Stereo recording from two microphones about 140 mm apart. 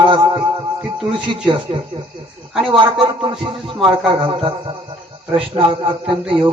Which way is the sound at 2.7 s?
40° right (ahead or behind).